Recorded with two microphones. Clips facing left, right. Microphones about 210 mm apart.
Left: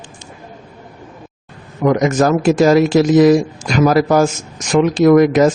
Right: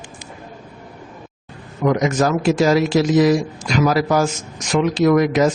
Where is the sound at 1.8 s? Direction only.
50° left (ahead or behind).